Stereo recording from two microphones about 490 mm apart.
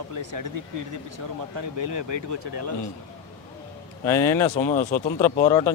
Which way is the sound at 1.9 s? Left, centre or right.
Right.